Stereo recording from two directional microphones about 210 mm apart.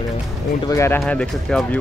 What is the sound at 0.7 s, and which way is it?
Speech, 15° left (ahead or behind).